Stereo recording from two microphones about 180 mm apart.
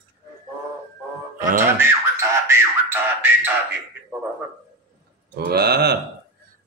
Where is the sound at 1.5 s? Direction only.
15° right (ahead or behind).